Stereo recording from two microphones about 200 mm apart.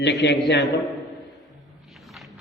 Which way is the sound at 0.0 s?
60° left (ahead or behind).